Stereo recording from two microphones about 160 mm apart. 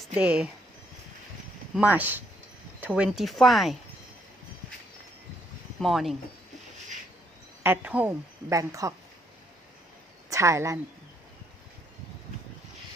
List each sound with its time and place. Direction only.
0.1 s a woman's voice: 5° right (ahead or behind)
1.7 s a woman's voice: 10° right (ahead or behind)
5.8 s speech: centre (ahead or behind)
7.6 s a woman's voice: 10° right (ahead or behind)
10.2 s speech: 20° right (ahead or behind)